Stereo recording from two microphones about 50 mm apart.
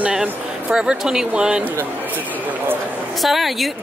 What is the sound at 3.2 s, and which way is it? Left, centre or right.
Speech, centre.